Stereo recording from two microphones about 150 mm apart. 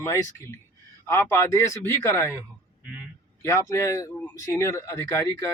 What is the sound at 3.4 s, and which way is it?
A man's voice, 20° left (ahead or behind).